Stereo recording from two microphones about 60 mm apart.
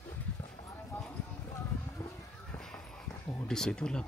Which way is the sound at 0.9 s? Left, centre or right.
Left.